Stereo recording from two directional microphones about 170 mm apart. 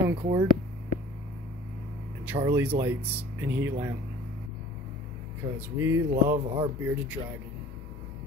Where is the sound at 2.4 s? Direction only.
10° right (ahead or behind).